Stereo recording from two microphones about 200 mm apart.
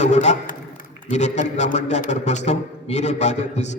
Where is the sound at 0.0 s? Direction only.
35° left (ahead or behind).